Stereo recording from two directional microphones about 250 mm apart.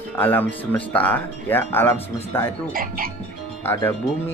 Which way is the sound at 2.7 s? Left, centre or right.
Right.